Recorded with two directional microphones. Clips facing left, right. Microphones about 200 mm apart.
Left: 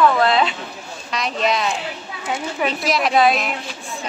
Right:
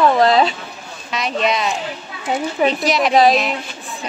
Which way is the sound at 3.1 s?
35° right (ahead or behind).